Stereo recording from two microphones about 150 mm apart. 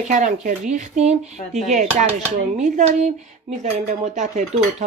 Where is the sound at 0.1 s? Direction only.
55° right (ahead or behind).